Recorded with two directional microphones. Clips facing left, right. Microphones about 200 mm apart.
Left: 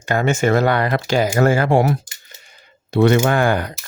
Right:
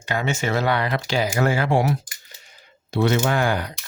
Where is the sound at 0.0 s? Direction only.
50° left (ahead or behind).